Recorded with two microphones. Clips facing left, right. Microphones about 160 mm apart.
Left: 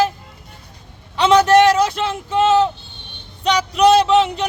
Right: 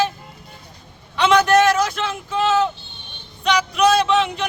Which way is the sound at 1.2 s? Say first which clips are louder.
Left 3 dB; 30° left (ahead or behind).